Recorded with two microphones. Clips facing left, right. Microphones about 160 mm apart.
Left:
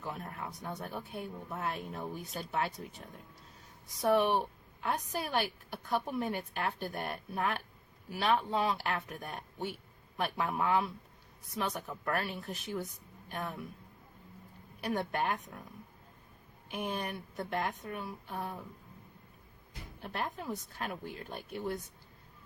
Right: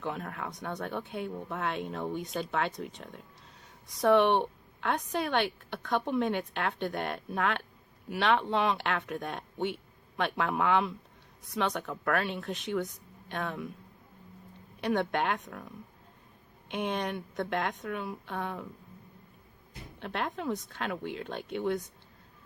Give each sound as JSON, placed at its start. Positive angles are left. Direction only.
{"t": 0.0, "sound": "a woman's voice", "side_deg": -80}
{"t": 4.0, "sound": "a woman's voice", "side_deg": -75}
{"t": 10.2, "sound": "a woman's voice", "side_deg": -85}
{"t": 14.9, "sound": "speech", "side_deg": -80}
{"t": 16.6, "sound": "a woman's voice", "side_deg": -80}
{"t": 17.3, "sound": "a woman's voice", "side_deg": -80}
{"t": 20.0, "sound": "a woman's voice", "side_deg": -90}